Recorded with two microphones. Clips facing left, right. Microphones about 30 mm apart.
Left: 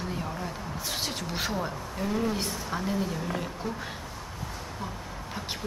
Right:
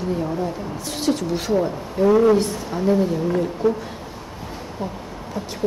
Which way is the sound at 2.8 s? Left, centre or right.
Centre.